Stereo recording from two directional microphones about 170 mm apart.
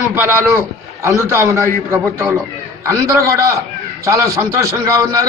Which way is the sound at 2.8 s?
20° right (ahead or behind).